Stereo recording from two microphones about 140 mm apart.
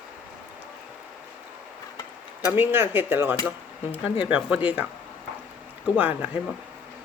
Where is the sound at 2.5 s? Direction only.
15° right (ahead or behind).